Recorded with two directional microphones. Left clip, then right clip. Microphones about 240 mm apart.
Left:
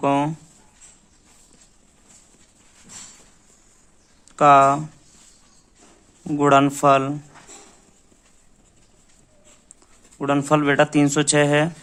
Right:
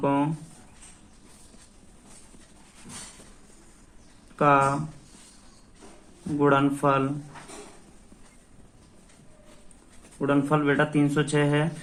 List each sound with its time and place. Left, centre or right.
0.0 s a sound: left
4.4 s speech: left
6.4 s speech: left
10.2 s speech: left